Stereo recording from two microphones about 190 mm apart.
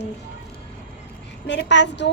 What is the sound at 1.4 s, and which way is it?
Speech, 65° left (ahead or behind).